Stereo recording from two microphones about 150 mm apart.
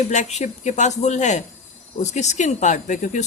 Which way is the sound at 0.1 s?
50° left (ahead or behind).